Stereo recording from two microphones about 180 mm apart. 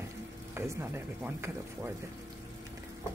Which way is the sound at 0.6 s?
15° right (ahead or behind).